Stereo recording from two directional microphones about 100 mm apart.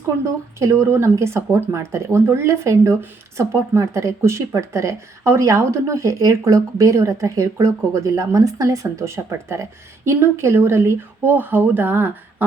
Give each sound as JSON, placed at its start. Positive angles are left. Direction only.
{"t": 0.6, "sound": "speech", "side_deg": -30}